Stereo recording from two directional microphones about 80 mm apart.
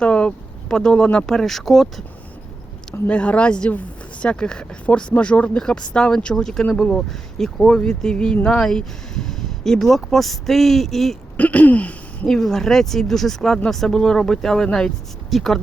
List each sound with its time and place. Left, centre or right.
0.0 s speech: centre
3.1 s speech: centre
11.3 s speech: centre
12.3 s speech: centre